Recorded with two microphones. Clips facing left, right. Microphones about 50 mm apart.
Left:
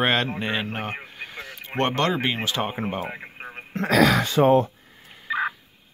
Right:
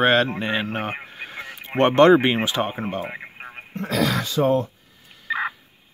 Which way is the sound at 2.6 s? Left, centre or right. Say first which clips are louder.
Right 2 dB; centre.